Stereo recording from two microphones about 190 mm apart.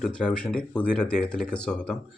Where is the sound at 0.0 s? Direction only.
5° left (ahead or behind).